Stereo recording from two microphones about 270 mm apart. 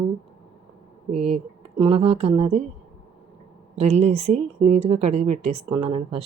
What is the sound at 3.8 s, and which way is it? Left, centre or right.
Speech, right.